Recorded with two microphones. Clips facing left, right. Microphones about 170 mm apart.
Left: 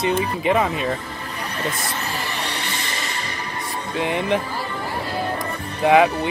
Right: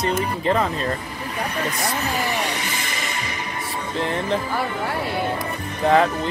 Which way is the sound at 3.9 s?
15° left (ahead or behind).